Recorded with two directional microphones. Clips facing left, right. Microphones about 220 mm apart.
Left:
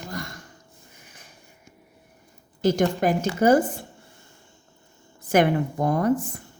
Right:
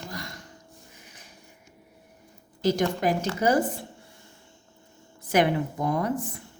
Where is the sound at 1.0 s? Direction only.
50° left (ahead or behind).